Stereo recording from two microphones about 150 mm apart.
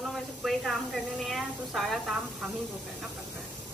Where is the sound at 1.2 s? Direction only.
Centre (ahead or behind).